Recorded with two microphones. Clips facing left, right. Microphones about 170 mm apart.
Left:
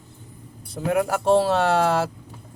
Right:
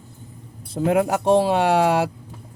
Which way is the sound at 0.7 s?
25° right (ahead or behind).